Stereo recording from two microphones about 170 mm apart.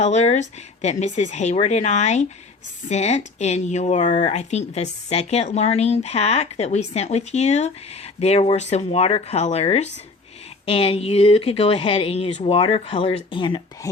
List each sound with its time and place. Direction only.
0.0 s speech: 40° left (ahead or behind)